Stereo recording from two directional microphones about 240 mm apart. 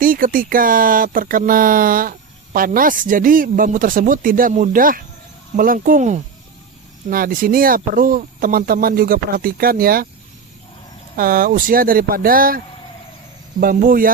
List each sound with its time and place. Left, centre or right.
0.0 s speech: right
11.2 s speech: right